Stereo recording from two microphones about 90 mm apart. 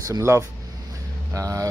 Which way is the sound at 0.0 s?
35° right (ahead or behind).